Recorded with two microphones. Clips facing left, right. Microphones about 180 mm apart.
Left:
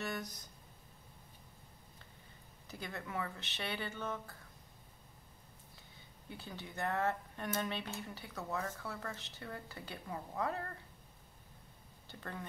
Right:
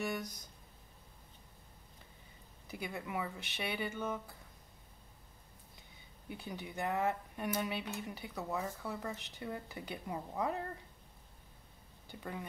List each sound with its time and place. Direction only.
0.0 s speech: 15° right (ahead or behind)
2.7 s speech: 10° right (ahead or behind)
6.2 s speech: 15° right (ahead or behind)
12.1 s speech: 10° right (ahead or behind)